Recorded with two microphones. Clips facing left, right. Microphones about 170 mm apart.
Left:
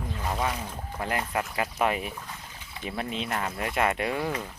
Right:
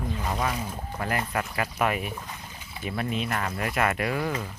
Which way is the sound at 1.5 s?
25° left (ahead or behind).